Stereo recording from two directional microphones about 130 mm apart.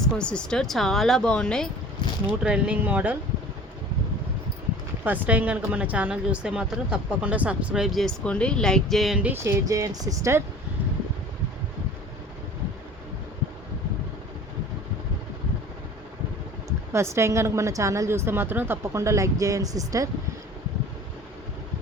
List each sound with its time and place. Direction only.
0.0 s speech: 5° left (ahead or behind)
2.4 s speech: 5° right (ahead or behind)
5.0 s speech: 15° right (ahead or behind)
9.2 s a woman's voice: 15° right (ahead or behind)
16.6 s a woman's voice: 20° right (ahead or behind)